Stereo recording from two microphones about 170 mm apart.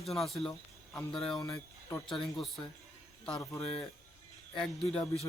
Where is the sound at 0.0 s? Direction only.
Centre (ahead or behind).